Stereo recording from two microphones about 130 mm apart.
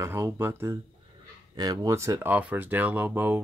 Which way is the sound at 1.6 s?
30° right (ahead or behind).